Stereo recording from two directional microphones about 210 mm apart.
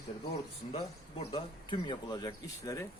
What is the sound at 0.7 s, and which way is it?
A man's voice, 25° left (ahead or behind).